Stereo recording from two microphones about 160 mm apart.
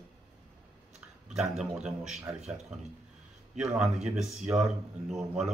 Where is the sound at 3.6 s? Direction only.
5° right (ahead or behind).